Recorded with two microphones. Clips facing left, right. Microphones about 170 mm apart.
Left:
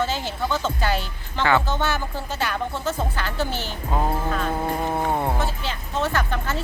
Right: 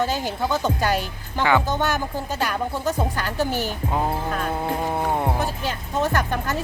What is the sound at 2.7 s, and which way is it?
Speech, 15° right (ahead or behind).